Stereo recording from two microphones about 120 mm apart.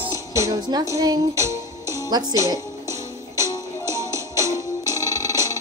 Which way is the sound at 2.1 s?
35° right (ahead or behind).